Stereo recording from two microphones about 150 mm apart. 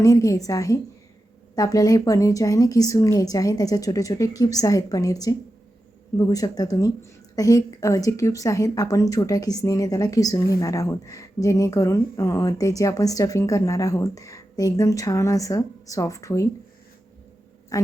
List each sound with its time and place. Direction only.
0.0 s a woman's voice: 20° left (ahead or behind)
17.7 s a woman's voice: 20° left (ahead or behind)